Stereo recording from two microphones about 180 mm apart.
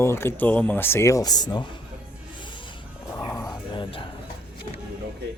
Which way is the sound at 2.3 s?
25° left (ahead or behind).